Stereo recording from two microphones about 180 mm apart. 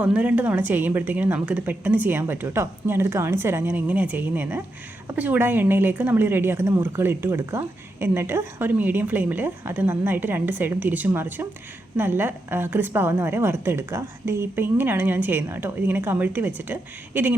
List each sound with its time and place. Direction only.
0.0 s a woman's voice: 10° right (ahead or behind)